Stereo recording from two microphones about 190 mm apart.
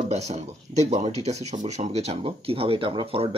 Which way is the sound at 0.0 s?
35° right (ahead or behind).